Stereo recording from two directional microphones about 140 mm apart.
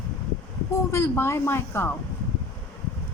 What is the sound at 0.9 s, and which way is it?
Speech, 20° left (ahead or behind).